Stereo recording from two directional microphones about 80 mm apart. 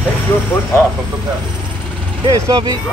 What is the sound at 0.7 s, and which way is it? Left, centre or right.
Speech, left.